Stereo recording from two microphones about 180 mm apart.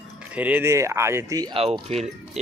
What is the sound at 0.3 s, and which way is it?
Speech, 10° right (ahead or behind).